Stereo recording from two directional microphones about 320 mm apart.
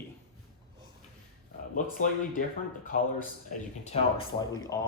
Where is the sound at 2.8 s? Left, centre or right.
Left.